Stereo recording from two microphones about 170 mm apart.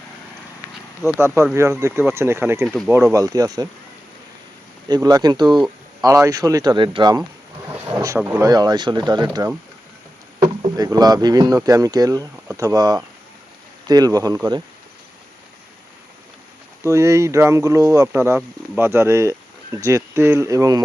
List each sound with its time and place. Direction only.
1.0 s speech: centre (ahead or behind)
1.8 s speech: 15° right (ahead or behind)
2.6 s speech: centre (ahead or behind)
2.9 s speech: 15° right (ahead or behind)
4.9 s speech: 20° right (ahead or behind)
7.9 s speech: 15° right (ahead or behind)
10.8 s speech: 20° right (ahead or behind)
16.8 s speech: 15° right (ahead or behind)